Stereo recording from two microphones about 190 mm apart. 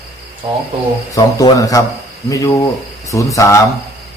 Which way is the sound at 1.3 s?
20° left (ahead or behind).